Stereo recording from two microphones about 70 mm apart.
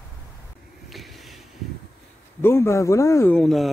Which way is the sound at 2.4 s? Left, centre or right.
Left.